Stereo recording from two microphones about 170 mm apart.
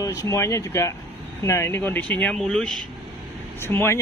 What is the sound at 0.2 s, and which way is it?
Speech, 15° left (ahead or behind).